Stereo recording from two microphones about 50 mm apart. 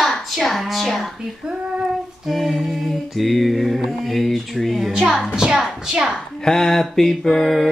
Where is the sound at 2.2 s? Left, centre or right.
Centre.